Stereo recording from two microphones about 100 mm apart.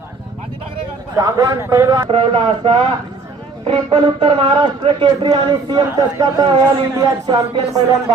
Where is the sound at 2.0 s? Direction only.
65° right (ahead or behind).